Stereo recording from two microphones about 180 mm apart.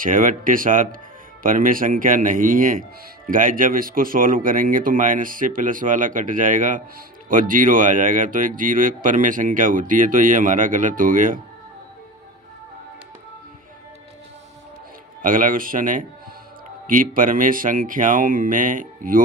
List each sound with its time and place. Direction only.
0.0 s speech: 45° right (ahead or behind)
15.2 s speech: 50° right (ahead or behind)